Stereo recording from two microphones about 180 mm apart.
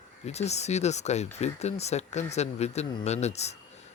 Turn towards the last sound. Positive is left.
turn(degrees=35)  # may be behind; listen again after turning